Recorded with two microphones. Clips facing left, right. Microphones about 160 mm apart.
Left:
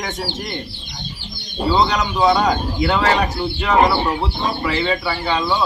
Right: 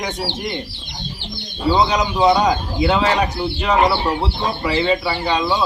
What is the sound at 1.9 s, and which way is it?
Speech, 15° right (ahead or behind).